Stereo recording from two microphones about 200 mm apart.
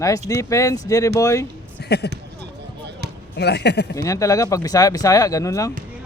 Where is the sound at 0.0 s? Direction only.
15° left (ahead or behind).